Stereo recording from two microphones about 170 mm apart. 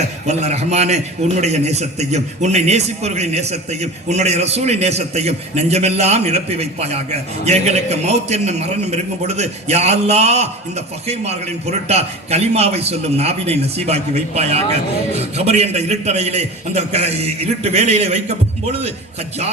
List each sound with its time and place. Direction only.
0.3 s a man's voice: 40° right (ahead or behind)